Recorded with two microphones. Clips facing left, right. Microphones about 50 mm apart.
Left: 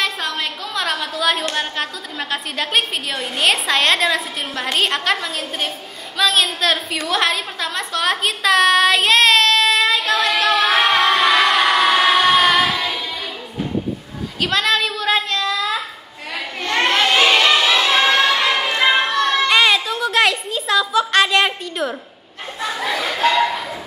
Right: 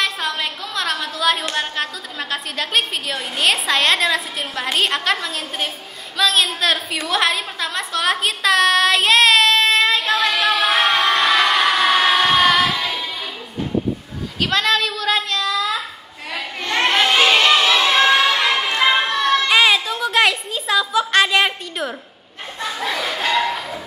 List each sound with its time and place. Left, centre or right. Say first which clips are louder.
0.0 s a woman's voice: even; centre
9.5 s child singing: even; right
10.3 s music: left 1 dB; centre
14.4 s a woman's voice: even; centre
16.6 s a sound: even; centre
22.6 s speech: left 1 dB; centre